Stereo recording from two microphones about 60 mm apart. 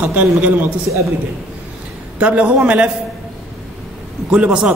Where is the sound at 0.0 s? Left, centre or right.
Right.